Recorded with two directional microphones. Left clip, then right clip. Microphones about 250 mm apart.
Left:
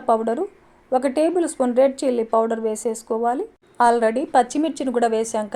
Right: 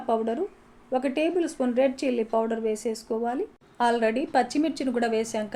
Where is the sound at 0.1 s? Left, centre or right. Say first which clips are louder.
Left 7 dB; left.